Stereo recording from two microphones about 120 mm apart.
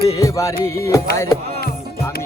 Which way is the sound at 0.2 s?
25° left (ahead or behind).